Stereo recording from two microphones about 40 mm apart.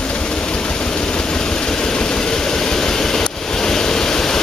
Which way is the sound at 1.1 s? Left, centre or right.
Centre.